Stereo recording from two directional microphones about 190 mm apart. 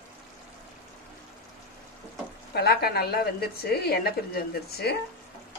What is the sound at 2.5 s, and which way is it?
A woman's voice, 55° left (ahead or behind).